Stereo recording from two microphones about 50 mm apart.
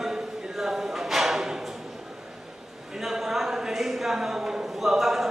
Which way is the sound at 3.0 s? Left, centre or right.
Centre.